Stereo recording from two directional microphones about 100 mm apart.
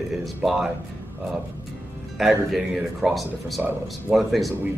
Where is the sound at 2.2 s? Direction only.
Centre (ahead or behind).